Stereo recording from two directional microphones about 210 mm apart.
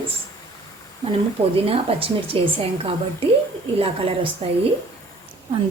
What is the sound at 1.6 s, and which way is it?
A woman's voice, 25° right (ahead or behind).